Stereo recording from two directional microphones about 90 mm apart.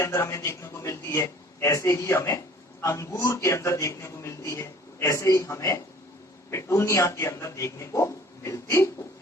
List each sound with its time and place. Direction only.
0.0 s a man's voice: 30° left (ahead or behind)